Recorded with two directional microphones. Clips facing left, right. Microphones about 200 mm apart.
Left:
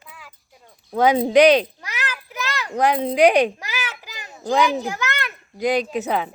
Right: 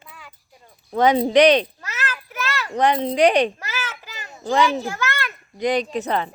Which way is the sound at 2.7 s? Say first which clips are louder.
Even; 5° left (ahead or behind).